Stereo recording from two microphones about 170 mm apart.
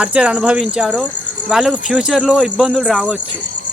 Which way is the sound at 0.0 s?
5° right (ahead or behind).